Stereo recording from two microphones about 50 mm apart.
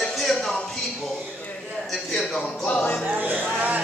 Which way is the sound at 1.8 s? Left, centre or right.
Centre.